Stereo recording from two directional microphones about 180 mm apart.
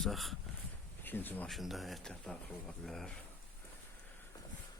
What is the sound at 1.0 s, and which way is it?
Speech, 10° left (ahead or behind).